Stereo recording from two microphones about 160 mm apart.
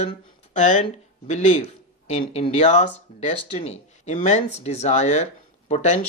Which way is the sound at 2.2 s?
35° left (ahead or behind).